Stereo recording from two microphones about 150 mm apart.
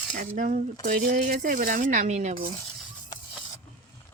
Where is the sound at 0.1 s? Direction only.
65° right (ahead or behind).